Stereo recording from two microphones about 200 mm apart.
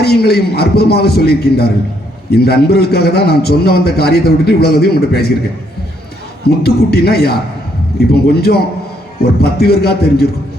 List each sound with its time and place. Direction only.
0.0 s a man's voice: 50° left (ahead or behind)
6.6 s a man's voice: 50° left (ahead or behind)